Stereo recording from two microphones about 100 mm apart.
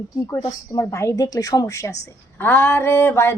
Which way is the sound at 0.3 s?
40° left (ahead or behind).